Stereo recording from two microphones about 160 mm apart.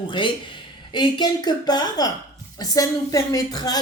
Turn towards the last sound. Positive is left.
turn(degrees=25)  # may be behind; listen again after turning